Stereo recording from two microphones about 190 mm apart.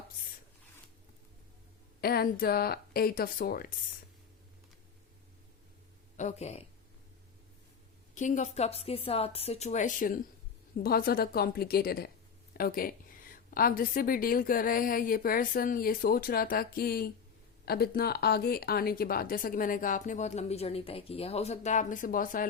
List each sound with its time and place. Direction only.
2.0 s a woman's voice: 55° left (ahead or behind)
6.1 s speech: 35° left (ahead or behind)
8.1 s a woman's voice: 40° left (ahead or behind)